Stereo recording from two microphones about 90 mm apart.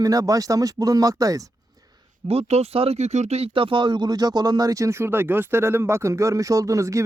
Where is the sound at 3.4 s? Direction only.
80° right.